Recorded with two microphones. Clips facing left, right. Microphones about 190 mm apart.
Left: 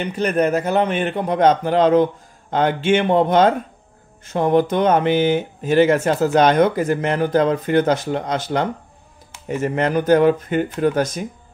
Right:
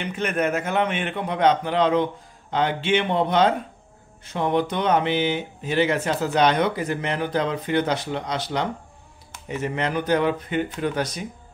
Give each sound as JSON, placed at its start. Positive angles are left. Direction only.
{"t": 0.0, "sound": "a man's voice", "side_deg": 35}